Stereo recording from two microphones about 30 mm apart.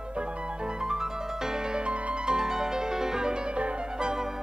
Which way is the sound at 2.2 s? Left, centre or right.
Right.